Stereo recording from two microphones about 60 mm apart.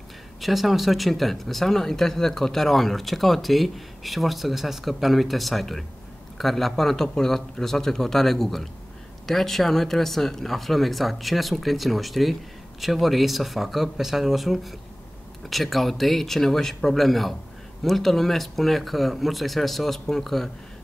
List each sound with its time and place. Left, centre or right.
0.4 s speech: centre